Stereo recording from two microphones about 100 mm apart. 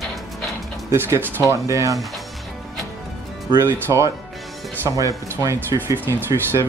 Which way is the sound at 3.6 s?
30° right (ahead or behind).